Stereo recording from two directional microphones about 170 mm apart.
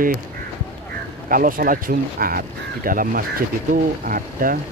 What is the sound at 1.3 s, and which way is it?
Speech, 55° right (ahead or behind).